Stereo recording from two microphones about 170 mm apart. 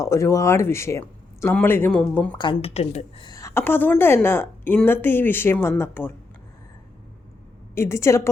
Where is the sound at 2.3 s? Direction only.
30° left (ahead or behind).